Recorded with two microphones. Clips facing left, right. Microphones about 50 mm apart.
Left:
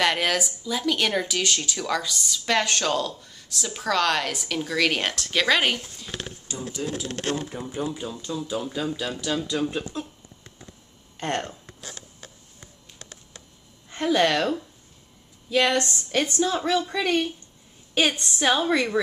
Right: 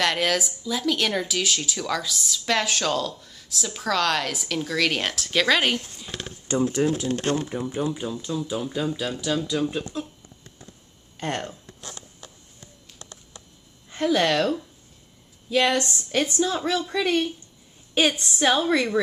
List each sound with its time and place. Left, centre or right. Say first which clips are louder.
0.0 s speech: even; centre
6.4 s speech: right 12 dB; right
7.1 s speech: right 4 dB; left
7.8 s speech: right 3 dB; centre
11.1 s speech: left 1 dB; centre
13.8 s speech: even; centre
15.5 s speech: even; centre